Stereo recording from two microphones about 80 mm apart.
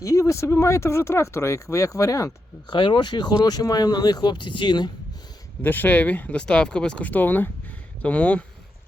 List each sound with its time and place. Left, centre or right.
0.0 s speech: left
2.6 s speech: left
5.6 s speech: left